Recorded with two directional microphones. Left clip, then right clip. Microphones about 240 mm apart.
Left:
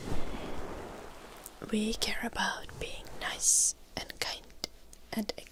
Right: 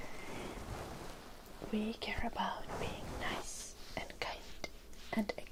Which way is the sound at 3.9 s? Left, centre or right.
Left.